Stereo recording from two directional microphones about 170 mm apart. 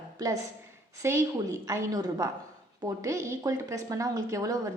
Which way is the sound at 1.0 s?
15° right (ahead or behind).